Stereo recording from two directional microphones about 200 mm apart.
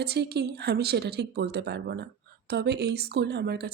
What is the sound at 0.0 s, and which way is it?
Speech, 55° right (ahead or behind).